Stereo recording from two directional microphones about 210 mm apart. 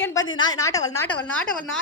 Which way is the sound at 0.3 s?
20° left (ahead or behind).